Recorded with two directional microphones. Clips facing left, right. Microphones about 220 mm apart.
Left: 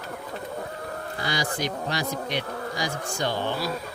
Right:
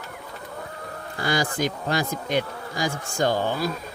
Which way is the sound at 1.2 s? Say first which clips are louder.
Right 5 dB; 50° right (ahead or behind).